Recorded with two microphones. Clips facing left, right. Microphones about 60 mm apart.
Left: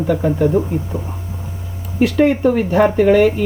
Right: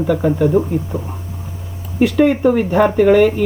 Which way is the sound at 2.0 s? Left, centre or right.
Centre.